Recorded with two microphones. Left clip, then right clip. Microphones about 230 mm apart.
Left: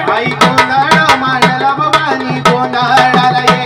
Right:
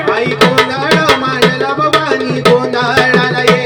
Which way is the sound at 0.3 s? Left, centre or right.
Centre.